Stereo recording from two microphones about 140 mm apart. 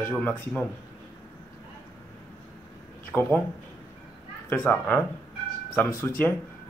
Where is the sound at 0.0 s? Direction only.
10° left (ahead or behind).